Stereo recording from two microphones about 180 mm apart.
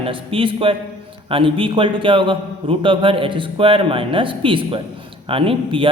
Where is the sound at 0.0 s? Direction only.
30° right (ahead or behind).